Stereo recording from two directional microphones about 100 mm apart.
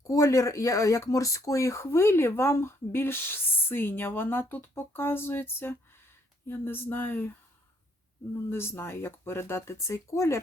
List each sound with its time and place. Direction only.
0.1 s speech: 35° left (ahead or behind)
8.4 s speech: 20° left (ahead or behind)